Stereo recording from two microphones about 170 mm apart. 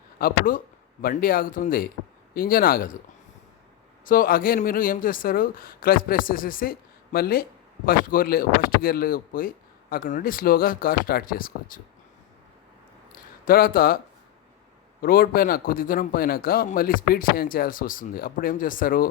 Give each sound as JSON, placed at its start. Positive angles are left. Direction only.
{"t": 0.2, "sound": "a man's voice", "side_deg": 55}
{"t": 4.0, "sound": "a man's voice", "side_deg": 55}
{"t": 13.4, "sound": "a man's voice", "side_deg": 55}
{"t": 15.0, "sound": "a man's voice", "side_deg": 55}